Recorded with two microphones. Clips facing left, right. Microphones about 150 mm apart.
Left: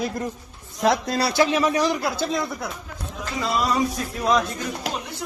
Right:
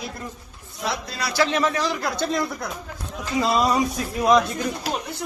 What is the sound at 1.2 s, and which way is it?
Speech, 20° left (ahead or behind).